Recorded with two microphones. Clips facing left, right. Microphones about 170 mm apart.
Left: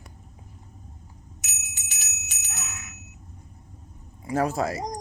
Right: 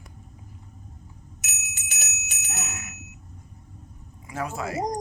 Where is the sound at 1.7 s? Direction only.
60° right (ahead or behind).